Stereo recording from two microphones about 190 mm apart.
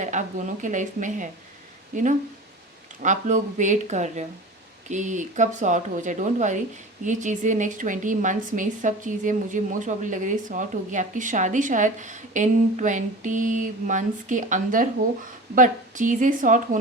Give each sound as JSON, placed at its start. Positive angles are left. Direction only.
{"t": 0.0, "sound": "a woman's voice", "side_deg": -40}
{"t": 3.0, "sound": "a woman's voice", "side_deg": -40}